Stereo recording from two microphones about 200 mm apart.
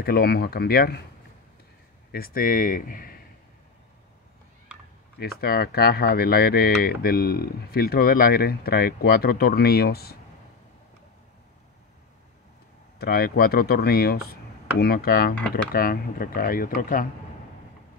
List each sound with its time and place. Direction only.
0.0 s speech: 50° left (ahead or behind)
2.1 s speech: 45° left (ahead or behind)
5.2 s speech: 50° left (ahead or behind)
13.0 s speech: 50° left (ahead or behind)